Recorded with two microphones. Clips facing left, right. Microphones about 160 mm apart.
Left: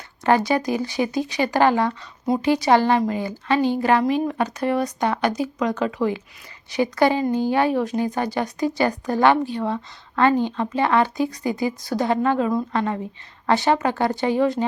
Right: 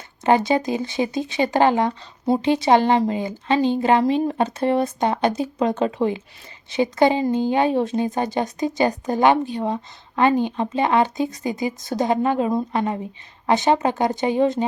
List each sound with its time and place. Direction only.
0.3 s a woman's voice: 20° right (ahead or behind)